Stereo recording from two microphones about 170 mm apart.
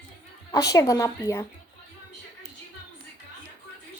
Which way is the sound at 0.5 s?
20° left (ahead or behind).